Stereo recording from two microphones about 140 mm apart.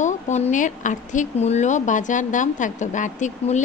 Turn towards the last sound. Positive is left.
turn(degrees=60)  # may be behind; listen again after turning